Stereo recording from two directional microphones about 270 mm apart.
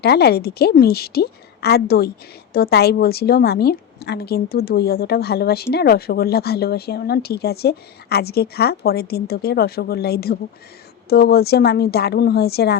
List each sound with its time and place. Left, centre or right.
0.0 s a woman's voice: left